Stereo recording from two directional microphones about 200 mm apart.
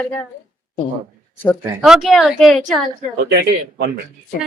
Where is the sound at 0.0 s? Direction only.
5° left (ahead or behind).